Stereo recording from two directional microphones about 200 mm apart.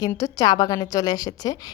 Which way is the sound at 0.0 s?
20° left (ahead or behind).